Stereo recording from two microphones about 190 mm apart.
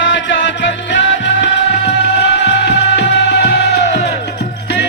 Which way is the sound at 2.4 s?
60° left (ahead or behind).